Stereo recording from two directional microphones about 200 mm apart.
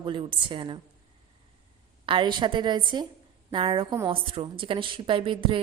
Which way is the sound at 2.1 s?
25° right (ahead or behind).